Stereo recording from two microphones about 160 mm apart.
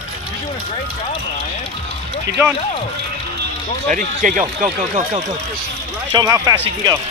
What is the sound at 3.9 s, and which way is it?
Speech, 55° right (ahead or behind).